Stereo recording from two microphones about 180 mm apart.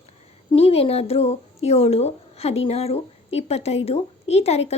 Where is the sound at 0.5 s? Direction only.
35° left (ahead or behind).